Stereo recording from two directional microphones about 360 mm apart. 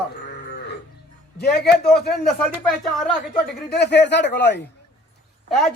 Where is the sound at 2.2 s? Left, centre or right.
Centre.